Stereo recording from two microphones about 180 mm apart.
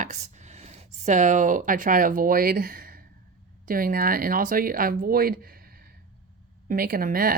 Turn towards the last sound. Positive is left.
turn(degrees=-50)  # may be behind; listen again after turning